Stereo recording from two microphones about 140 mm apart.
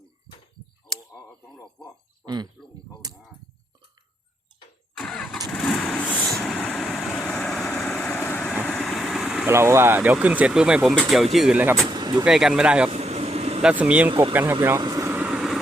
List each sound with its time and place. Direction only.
2.2 s speech: 30° right (ahead or behind)
4.9 s vehicle: 5° left (ahead or behind)
8.3 s vehicle: 10° left (ahead or behind)
9.5 s speech: 20° right (ahead or behind)
11.9 s vehicle: 30° right (ahead or behind)
12.2 s speech: 5° right (ahead or behind)
12.9 s vehicle: 50° right (ahead or behind)
13.6 s speech: 5° right (ahead or behind)
14.8 s speech: 25° right (ahead or behind)
15.1 s vehicle: 10° right (ahead or behind)